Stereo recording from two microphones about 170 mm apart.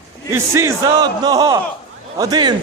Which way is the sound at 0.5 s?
20° right (ahead or behind).